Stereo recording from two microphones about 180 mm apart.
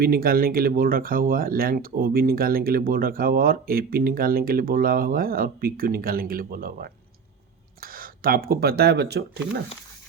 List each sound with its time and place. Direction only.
0.0 s speech: 55° right (ahead or behind)